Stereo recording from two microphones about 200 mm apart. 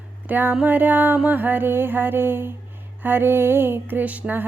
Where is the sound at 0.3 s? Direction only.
10° right (ahead or behind).